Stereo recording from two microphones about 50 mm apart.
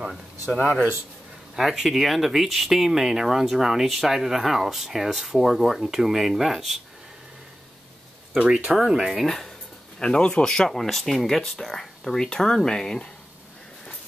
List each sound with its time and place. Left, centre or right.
1.5 s speech: centre
8.4 s speech: centre
8.8 s speech: centre
9.2 s speech: centre
9.9 s speech: centre